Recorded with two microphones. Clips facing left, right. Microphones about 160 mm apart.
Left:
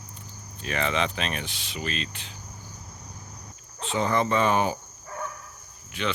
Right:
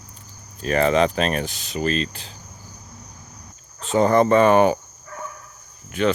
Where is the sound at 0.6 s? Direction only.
40° right (ahead or behind).